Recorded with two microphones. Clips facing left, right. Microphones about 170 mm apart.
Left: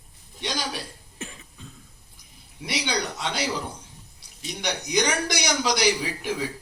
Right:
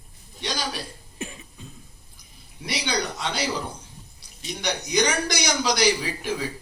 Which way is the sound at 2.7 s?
20° left (ahead or behind).